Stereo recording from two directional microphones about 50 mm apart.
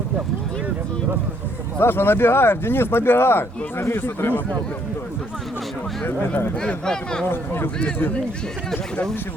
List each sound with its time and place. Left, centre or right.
1.8 s speech: left
6.1 s speech: left
6.8 s speech: centre
7.3 s speech: left